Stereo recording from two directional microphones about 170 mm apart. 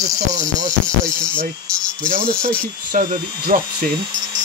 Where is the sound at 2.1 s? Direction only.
55° right (ahead or behind).